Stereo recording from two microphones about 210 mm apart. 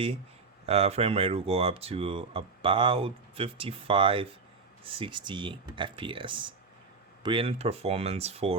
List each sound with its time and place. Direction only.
0.6 s speech: 30° right (ahead or behind)